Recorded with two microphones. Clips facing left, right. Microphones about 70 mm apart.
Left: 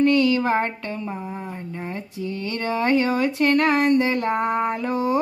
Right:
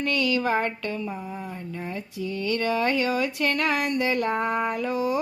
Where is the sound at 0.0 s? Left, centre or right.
Left.